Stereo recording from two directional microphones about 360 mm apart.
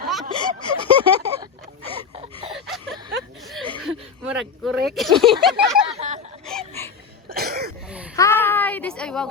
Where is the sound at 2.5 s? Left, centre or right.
Centre.